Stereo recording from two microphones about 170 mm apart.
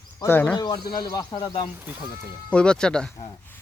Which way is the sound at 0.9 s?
25° left (ahead or behind).